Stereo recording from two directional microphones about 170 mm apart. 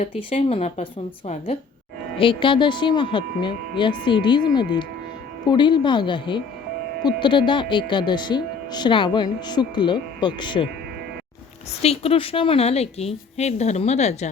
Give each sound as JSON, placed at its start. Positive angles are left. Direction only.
{"t": 0.0, "sound": "a woman's voice", "side_deg": 35}
{"t": 2.1, "sound": "speech", "side_deg": 30}
{"t": 11.8, "sound": "a woman's voice", "side_deg": 35}